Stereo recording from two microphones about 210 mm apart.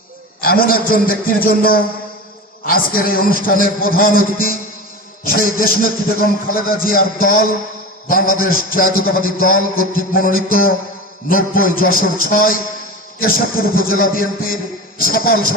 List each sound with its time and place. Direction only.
0.4 s a man's voice: 45° left (ahead or behind)